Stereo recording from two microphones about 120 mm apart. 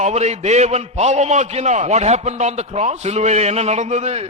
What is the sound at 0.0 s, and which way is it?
A man's voice, 65° right (ahead or behind).